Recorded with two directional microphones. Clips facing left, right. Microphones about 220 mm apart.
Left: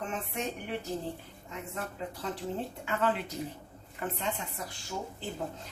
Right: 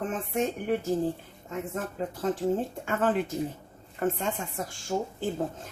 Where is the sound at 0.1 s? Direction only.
50° right (ahead or behind).